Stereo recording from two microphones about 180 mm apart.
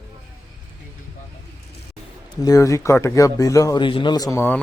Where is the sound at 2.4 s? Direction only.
20° left (ahead or behind).